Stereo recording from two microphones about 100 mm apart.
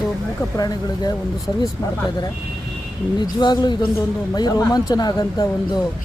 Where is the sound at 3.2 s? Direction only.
45° left (ahead or behind).